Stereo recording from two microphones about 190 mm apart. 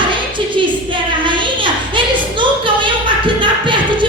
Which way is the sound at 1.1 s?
25° right (ahead or behind).